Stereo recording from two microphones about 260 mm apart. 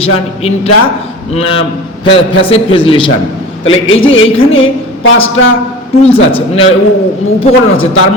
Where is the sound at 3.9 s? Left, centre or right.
Left.